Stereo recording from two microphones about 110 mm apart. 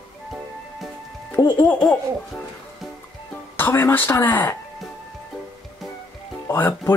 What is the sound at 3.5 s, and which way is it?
Speech, 20° left (ahead or behind).